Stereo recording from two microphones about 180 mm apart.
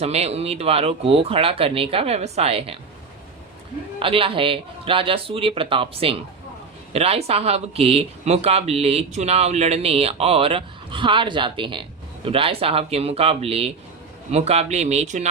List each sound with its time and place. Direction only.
0.0 s speech: 35° right (ahead or behind)
4.0 s speech: 30° right (ahead or behind)